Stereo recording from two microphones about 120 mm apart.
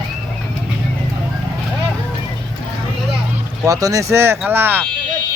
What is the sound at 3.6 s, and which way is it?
Speech, 30° right (ahead or behind).